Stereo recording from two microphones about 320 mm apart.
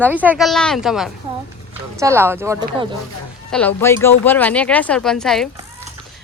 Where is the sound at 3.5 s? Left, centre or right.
Centre.